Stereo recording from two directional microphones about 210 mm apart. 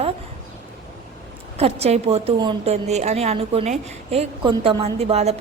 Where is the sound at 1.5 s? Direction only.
30° right (ahead or behind).